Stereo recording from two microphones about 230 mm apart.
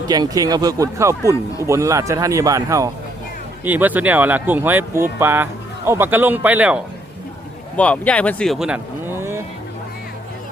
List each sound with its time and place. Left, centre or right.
0.1 s speech: centre
1.2 s speech: centre
1.6 s speech: centre
7.8 s speech: centre